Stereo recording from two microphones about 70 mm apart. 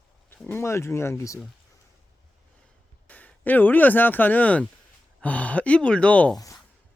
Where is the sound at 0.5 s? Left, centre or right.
Left.